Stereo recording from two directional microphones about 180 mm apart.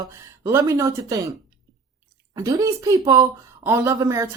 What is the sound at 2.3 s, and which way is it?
Speech, 20° right (ahead or behind).